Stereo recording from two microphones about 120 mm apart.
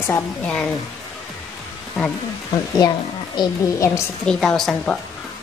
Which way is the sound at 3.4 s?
40° left (ahead or behind).